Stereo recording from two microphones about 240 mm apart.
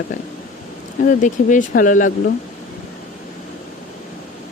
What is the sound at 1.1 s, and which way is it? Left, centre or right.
Speech, left.